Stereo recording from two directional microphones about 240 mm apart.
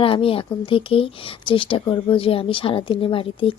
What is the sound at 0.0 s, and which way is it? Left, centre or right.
Speech, left.